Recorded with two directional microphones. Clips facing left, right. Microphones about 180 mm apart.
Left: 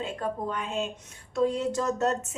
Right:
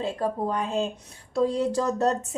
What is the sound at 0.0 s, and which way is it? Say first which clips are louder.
A woman's voice: right 4 dB; 35° right (ahead or behind).